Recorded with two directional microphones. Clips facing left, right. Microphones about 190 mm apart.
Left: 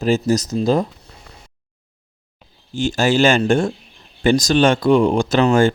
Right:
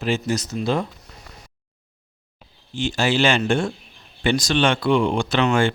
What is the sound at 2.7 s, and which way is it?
Speech, 45° left (ahead or behind).